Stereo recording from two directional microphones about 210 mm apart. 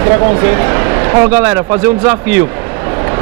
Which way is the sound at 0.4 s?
15° right (ahead or behind).